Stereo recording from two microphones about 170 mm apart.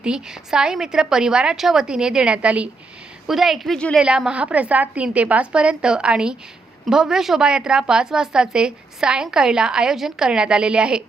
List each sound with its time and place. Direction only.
0.0 s a woman's voice: 5° right (ahead or behind)